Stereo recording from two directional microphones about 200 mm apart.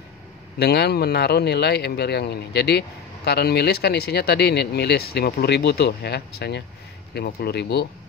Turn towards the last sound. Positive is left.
turn(degrees=55)  # may be behind; listen again after turning